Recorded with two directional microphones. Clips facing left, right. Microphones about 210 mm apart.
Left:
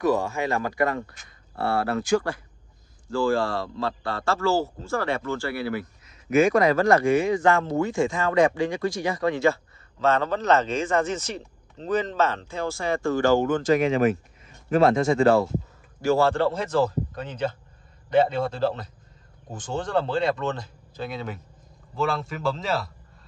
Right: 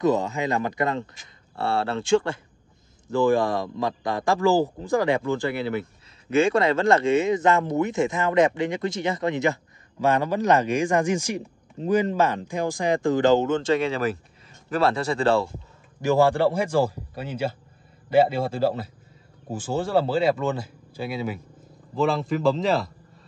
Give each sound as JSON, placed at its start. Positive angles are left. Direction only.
{"t": 0.0, "sound": "a man's voice", "side_deg": -20}
{"t": 16.0, "sound": "speech", "side_deg": -15}